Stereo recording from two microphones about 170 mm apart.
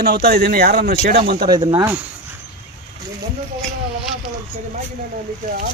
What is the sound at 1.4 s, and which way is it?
Speech, 25° right (ahead or behind).